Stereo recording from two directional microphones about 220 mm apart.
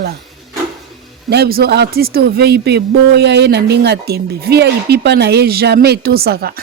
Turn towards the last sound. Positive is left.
turn(degrees=-45)  # may be behind; listen again after turning